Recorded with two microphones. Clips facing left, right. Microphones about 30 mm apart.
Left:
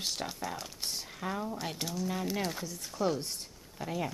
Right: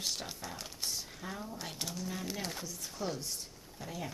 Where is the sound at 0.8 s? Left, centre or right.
Left.